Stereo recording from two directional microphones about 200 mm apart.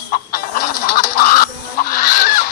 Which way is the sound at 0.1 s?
45° left (ahead or behind).